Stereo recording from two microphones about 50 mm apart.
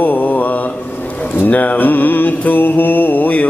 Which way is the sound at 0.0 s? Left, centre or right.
Left.